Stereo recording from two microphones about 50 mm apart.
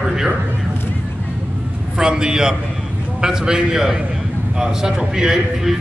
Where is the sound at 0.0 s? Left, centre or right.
Centre.